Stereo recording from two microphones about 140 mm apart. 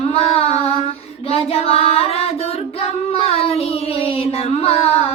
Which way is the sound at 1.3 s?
45° left (ahead or behind).